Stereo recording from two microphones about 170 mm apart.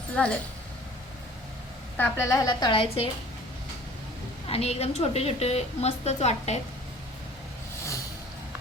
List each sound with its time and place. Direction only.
0.2 s speech: 10° left (ahead or behind)
2.0 s a woman's voice: 15° left (ahead or behind); by 3.1 s 35° left (ahead or behind)
4.4 s a woman's voice: 35° left (ahead or behind)